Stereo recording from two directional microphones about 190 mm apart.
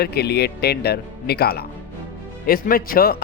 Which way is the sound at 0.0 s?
55° left (ahead or behind).